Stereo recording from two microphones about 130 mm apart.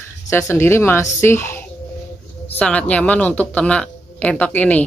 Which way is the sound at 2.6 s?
10° left (ahead or behind).